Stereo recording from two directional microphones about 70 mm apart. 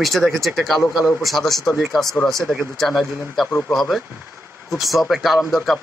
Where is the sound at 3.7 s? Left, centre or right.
Centre.